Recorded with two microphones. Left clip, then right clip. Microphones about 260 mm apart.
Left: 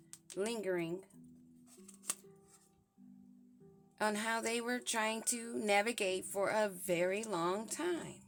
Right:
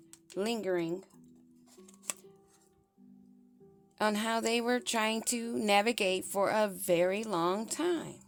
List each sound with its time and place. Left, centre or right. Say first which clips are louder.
0.3 s speech: right 5 dB; right
3.9 s speech: right 5 dB; right